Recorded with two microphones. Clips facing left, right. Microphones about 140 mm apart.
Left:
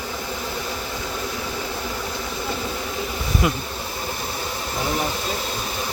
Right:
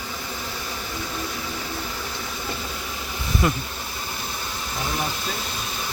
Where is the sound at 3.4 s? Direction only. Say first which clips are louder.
Even; 5° left (ahead or behind).